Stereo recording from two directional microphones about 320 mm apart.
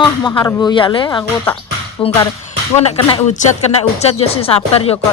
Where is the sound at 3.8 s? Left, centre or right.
Centre.